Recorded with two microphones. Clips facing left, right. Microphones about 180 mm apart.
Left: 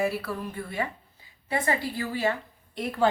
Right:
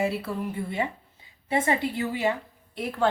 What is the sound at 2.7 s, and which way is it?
Speech, centre (ahead or behind).